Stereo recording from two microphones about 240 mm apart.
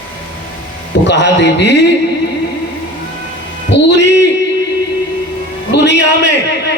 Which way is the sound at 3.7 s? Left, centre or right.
Left.